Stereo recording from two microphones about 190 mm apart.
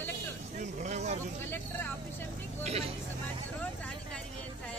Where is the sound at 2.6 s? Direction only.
35° right (ahead or behind).